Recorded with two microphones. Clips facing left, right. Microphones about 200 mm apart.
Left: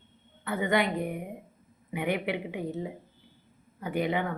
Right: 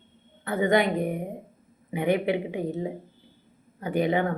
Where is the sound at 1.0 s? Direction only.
40° right (ahead or behind).